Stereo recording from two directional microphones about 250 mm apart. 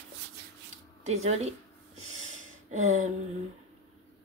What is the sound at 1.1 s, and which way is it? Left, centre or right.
Speech, right.